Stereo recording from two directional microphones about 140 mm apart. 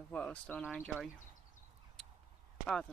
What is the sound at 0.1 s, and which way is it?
Speech, 10° left (ahead or behind).